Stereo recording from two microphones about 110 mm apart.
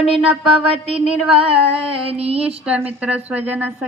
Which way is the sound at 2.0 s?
65° right (ahead or behind).